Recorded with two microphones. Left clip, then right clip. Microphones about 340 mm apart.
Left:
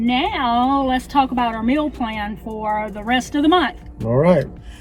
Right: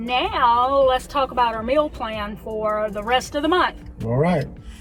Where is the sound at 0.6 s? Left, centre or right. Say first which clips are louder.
Even; right.